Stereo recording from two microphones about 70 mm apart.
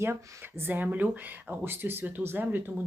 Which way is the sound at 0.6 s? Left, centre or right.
Right.